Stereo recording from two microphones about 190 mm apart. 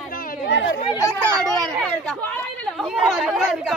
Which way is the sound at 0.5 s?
60° left (ahead or behind).